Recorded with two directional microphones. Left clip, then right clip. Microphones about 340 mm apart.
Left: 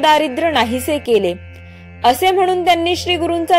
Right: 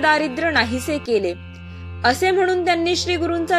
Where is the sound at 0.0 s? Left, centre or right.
Centre.